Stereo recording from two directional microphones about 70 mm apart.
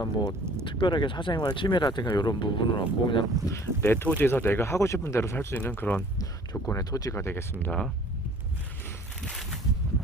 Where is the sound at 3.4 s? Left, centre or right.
Left.